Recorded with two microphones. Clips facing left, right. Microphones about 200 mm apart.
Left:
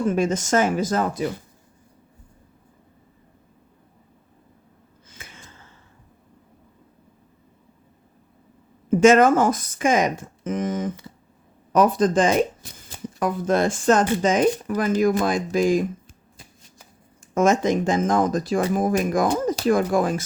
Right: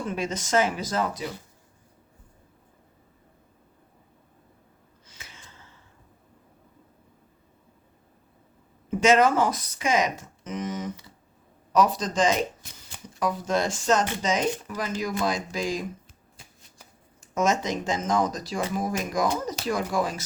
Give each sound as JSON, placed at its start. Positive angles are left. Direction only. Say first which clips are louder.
{"t": 0.1, "sound": "speech", "louder": "left 2 dB", "side_deg": 50}
{"t": 5.0, "sound": "a sound", "louder": "left 4 dB", "side_deg": 50}
{"t": 8.9, "sound": "speech", "louder": "left 6 dB", "side_deg": 50}
{"t": 17.3, "sound": "speech", "louder": "left 6 dB", "side_deg": 55}